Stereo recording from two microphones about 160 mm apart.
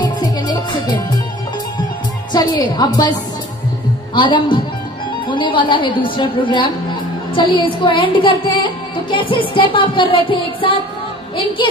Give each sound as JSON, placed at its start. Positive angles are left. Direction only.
{"t": 0.0, "sound": "music", "side_deg": 25}
{"t": 2.3, "sound": "a woman's voice", "side_deg": 25}
{"t": 5.3, "sound": "music", "side_deg": 30}